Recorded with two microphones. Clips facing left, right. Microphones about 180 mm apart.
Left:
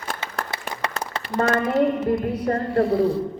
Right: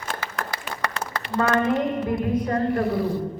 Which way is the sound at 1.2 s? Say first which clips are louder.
Even; 40° left (ahead or behind).